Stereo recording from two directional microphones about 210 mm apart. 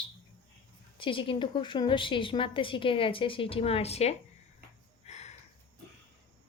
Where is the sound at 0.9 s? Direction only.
25° left (ahead or behind).